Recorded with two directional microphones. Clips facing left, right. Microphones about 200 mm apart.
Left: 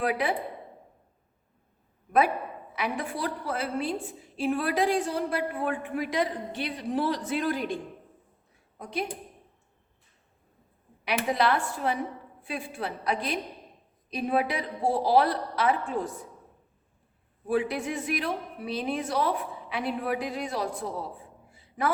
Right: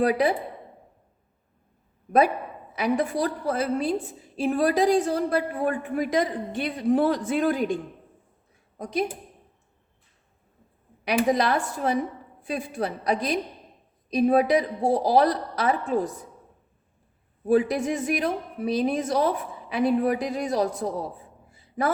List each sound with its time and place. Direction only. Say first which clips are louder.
0.0 s a woman's voice: right 6 dB; 40° right (ahead or behind)
2.7 s a woman's voice: right 8 dB; 40° right (ahead or behind)
8.8 s a woman's voice: right 6 dB; 40° right (ahead or behind)
11.0 s a woman's voice: right 4 dB; 45° right (ahead or behind)
17.5 s a woman's voice: right 6 dB; 40° right (ahead or behind)
21.5 s a sound: right 3 dB; 40° right (ahead or behind)